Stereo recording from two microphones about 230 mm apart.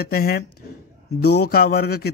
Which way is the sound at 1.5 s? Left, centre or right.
Left.